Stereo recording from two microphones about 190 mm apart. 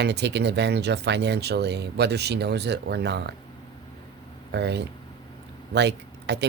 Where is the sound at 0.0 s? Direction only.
60° right (ahead or behind).